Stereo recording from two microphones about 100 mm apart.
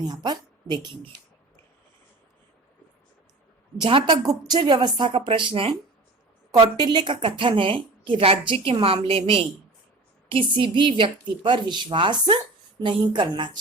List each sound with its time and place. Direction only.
0.1 s a woman's voice: 45° right (ahead or behind)
3.8 s a woman's voice: 55° right (ahead or behind)
6.7 s a woman's voice: 45° right (ahead or behind)